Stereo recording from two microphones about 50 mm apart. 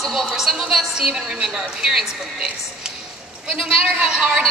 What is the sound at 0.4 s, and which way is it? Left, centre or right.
Speech, centre.